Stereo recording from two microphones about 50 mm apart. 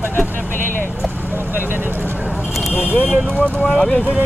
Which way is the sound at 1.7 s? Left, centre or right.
Right.